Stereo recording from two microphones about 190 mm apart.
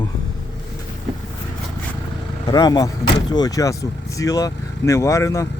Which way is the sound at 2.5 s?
20° left (ahead or behind).